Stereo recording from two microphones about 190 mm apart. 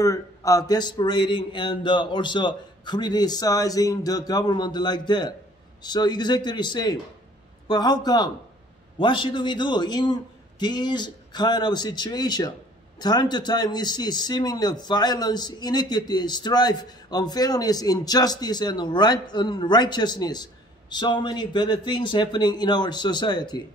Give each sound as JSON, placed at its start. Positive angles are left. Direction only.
{"t": 0.0, "sound": "a man's voice", "side_deg": 15}